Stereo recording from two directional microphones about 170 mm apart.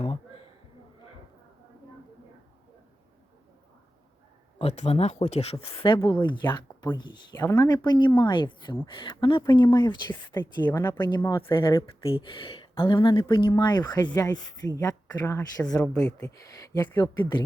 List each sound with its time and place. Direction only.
4.5 s a woman's voice: 35° left (ahead or behind); by 11.1 s 15° left (ahead or behind)
11.1 s a woman's voice: 25° left (ahead or behind)
12.0 s speech: 30° left (ahead or behind)
14.1 s a woman's voice: 10° left (ahead or behind)